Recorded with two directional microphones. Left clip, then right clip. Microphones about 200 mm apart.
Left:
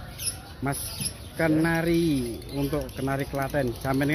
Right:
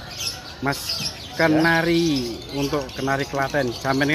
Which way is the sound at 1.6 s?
Centre (ahead or behind).